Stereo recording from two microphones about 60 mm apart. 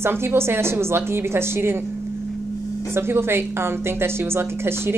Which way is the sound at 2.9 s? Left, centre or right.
Right.